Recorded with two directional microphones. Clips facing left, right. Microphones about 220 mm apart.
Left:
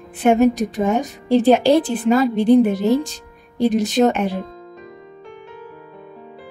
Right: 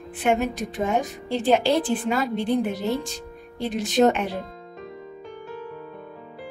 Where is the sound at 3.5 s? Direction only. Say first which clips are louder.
Left 6 dB; 40° left (ahead or behind).